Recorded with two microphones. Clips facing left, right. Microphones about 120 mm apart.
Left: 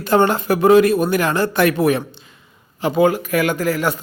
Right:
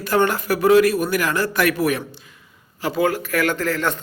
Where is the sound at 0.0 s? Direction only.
25° left (ahead or behind).